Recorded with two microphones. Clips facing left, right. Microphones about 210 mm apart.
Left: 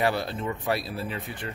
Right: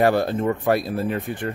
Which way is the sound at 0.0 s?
50° right (ahead or behind).